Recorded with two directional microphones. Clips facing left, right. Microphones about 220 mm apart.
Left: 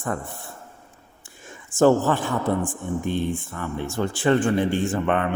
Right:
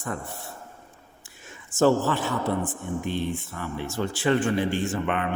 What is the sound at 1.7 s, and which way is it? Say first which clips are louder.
Speech: left 3 dB; 50° left (ahead or behind).